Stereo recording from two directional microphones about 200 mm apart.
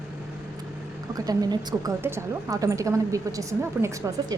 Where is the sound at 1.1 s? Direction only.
20° right (ahead or behind).